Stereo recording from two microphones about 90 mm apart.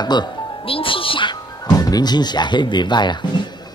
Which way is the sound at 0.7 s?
85° left.